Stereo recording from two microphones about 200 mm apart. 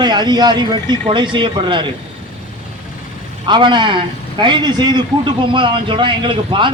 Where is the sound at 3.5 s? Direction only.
25° right (ahead or behind).